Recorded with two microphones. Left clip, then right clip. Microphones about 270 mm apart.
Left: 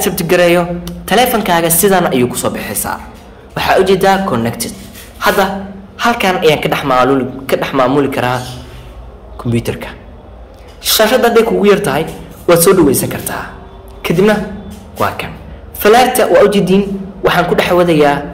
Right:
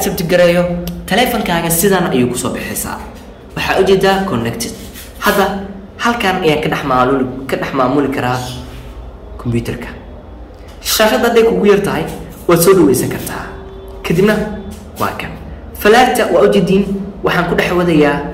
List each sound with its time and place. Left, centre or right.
0.0 s a man's voice: centre
5.9 s a woman's voice: left
9.4 s a woman's voice: left